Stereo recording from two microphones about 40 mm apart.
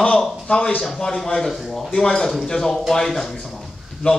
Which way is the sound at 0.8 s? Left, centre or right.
Centre.